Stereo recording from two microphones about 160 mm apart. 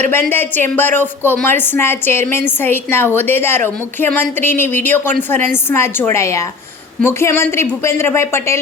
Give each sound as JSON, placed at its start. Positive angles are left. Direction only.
{"t": 0.0, "sound": "a woman's voice", "side_deg": 15}